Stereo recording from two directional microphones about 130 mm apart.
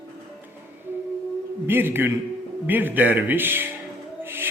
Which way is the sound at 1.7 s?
15° right (ahead or behind).